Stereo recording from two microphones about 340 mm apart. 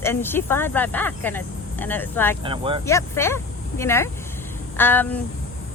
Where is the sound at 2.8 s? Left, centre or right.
Centre.